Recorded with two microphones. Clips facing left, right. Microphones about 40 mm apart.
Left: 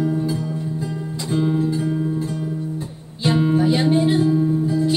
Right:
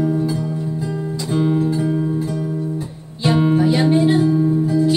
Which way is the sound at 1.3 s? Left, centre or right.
Centre.